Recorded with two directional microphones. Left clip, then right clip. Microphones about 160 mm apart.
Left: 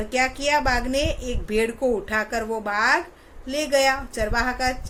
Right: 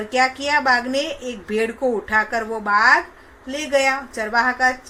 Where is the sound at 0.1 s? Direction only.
30° left (ahead or behind).